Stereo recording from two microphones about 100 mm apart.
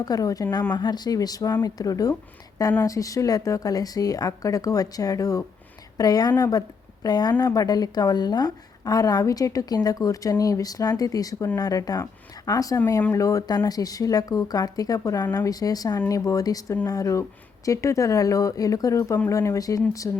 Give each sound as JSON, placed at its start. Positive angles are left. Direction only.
{"t": 0.0, "sound": "a woman's voice", "side_deg": 40}